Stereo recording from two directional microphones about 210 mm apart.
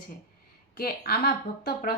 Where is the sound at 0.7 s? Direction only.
45° left (ahead or behind).